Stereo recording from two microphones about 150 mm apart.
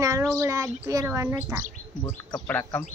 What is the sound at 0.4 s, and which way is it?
A woman's voice, 20° right (ahead or behind).